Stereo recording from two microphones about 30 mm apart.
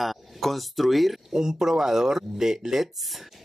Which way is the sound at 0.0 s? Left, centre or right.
Centre.